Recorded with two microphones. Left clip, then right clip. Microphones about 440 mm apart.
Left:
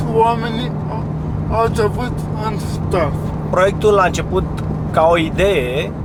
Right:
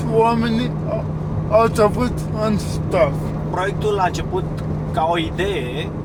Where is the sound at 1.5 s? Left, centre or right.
Right.